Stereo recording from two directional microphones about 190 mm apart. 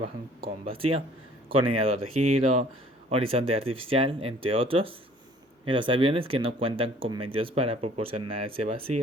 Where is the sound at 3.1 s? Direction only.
30° right (ahead or behind).